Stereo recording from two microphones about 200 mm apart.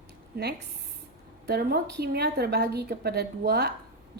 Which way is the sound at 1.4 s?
55° right (ahead or behind).